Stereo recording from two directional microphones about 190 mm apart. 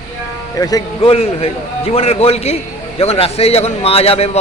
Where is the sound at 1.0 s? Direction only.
30° left (ahead or behind).